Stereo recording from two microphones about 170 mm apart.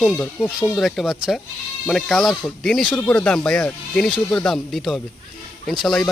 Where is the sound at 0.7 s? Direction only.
Centre (ahead or behind).